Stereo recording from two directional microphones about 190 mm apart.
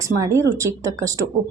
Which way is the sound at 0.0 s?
15° right (ahead or behind).